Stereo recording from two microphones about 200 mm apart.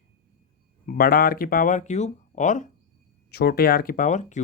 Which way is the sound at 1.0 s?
45° left (ahead or behind).